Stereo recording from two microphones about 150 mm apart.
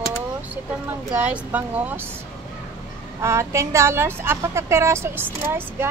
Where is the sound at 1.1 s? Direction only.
10° right (ahead or behind).